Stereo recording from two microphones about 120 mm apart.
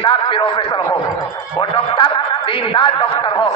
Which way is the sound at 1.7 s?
45° left (ahead or behind).